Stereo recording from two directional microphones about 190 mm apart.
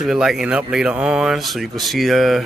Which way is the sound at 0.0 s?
5° right (ahead or behind).